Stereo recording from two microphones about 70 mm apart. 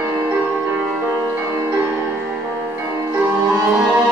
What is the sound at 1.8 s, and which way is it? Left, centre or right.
Music, right.